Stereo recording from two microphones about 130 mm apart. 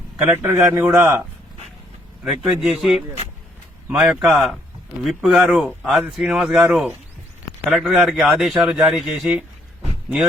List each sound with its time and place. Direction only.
0.2 s a man's voice: 15° right (ahead or behind)
2.2 s speech: centre (ahead or behind)